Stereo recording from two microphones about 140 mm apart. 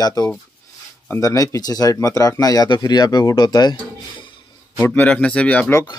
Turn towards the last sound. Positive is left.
turn(degrees=15)  # may be behind; listen again after turning